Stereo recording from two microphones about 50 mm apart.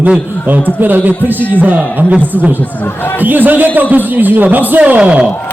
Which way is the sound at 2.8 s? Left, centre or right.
Left.